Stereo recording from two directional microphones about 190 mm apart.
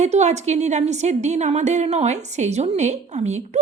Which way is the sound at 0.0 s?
35° right (ahead or behind).